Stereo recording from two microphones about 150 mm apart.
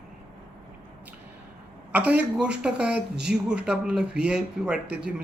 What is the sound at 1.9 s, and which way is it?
Speech, 10° right (ahead or behind).